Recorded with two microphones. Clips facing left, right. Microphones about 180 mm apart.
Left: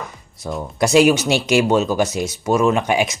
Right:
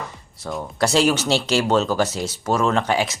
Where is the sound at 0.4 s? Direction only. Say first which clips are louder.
Left 2 dB; 10° left (ahead or behind).